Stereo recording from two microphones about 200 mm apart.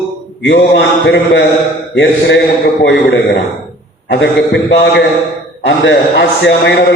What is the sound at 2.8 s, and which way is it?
A man's voice, 60° left (ahead or behind).